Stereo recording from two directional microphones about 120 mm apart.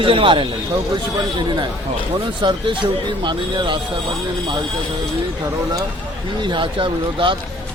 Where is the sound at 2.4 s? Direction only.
40° right (ahead or behind).